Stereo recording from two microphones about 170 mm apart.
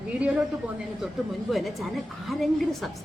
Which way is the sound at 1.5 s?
Centre (ahead or behind).